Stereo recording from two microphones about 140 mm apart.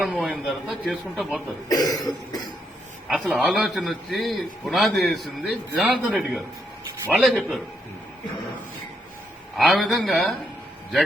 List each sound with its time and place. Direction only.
0.0 s a man's voice: centre (ahead or behind)
1.7 s cough: 25° left (ahead or behind)
3.1 s a man's voice: centre (ahead or behind)
9.6 s a man's voice: centre (ahead or behind)